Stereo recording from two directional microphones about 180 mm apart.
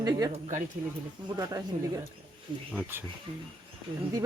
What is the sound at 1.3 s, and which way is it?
Speech, 20° right (ahead or behind).